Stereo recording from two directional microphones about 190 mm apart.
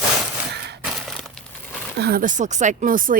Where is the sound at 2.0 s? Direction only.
55° right (ahead or behind).